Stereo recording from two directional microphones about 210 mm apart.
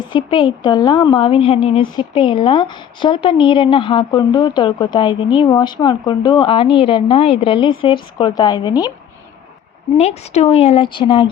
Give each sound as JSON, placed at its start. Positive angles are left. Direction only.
{"t": 0.0, "sound": "a woman's voice", "side_deg": 20}
{"t": 10.0, "sound": "a woman's voice", "side_deg": 30}